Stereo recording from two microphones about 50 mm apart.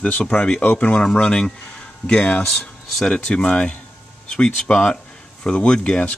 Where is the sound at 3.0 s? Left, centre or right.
Centre.